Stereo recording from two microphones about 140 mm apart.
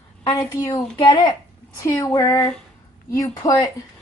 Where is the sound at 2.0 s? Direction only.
25° left (ahead or behind).